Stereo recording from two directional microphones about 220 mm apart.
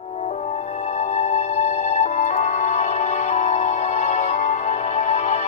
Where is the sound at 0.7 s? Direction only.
30° left (ahead or behind).